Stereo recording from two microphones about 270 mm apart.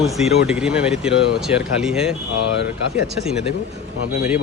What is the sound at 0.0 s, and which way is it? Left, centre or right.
Speech, centre.